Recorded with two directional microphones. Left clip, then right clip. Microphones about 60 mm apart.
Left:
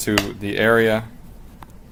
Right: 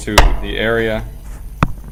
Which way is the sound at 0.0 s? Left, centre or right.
Left.